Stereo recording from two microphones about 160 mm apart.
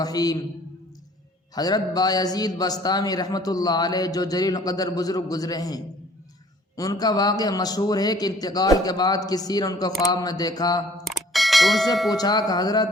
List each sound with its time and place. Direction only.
0.0 s a man's voice: 25° left (ahead or behind)
1.5 s a man's voice: 25° left (ahead or behind)
10.9 s a sound: centre (ahead or behind)
12.1 s a man's voice: 25° left (ahead or behind)